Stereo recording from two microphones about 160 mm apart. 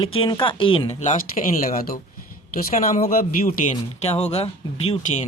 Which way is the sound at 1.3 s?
55° left (ahead or behind).